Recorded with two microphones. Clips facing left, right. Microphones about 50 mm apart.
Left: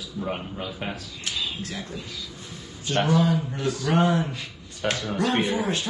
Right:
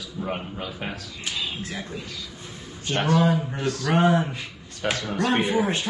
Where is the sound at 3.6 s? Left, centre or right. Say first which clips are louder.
Even; centre.